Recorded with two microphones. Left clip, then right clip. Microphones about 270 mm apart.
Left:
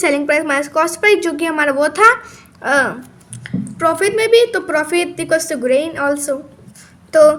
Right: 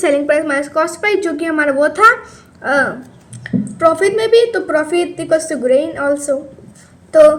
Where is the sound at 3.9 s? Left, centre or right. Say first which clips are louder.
Left 3 dB; left.